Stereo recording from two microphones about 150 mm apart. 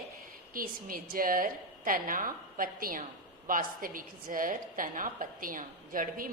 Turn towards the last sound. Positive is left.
turn(degrees=-65)  # may be behind; listen again after turning